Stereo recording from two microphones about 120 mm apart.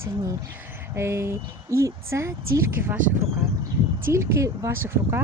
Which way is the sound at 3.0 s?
90° right.